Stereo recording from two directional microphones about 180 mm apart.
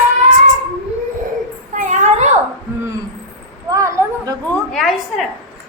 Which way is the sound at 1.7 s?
40° right (ahead or behind).